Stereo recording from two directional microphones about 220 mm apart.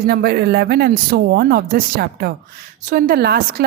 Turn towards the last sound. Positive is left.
turn(degrees=-45)  # may be behind; listen again after turning